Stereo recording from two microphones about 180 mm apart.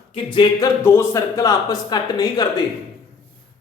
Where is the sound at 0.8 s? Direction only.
15° left (ahead or behind).